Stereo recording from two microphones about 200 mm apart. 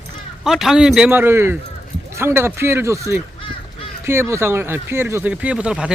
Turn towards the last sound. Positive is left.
turn(degrees=-5)  # may be behind; listen again after turning